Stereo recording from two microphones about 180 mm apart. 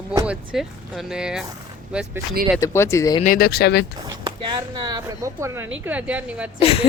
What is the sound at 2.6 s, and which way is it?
Speech, 15° left (ahead or behind).